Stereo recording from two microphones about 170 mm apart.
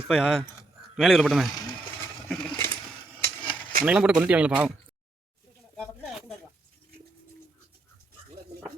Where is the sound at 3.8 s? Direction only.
5° right (ahead or behind).